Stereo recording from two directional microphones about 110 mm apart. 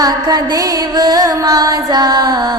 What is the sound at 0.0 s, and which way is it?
Music, 35° right (ahead or behind).